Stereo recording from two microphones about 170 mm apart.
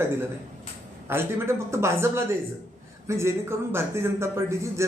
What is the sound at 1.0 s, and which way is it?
Speech, 15° right (ahead or behind).